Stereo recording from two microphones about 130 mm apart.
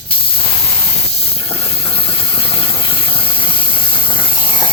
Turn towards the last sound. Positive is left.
turn(degrees=40)  # may be behind; listen again after turning